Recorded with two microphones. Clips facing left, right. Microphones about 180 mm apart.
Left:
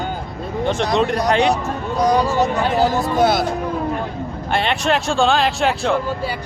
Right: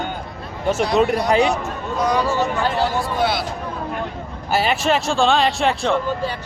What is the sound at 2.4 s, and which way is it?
Speech, 40° left (ahead or behind).